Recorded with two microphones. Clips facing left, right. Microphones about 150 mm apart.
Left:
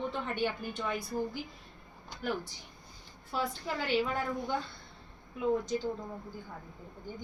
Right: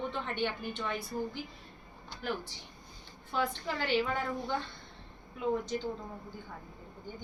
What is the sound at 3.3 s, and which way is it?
A woman's voice, 5° left (ahead or behind).